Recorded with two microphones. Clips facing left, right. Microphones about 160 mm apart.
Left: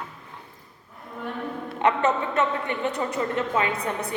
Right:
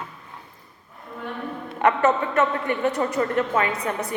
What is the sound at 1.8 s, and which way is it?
A woman's voice, 20° left (ahead or behind).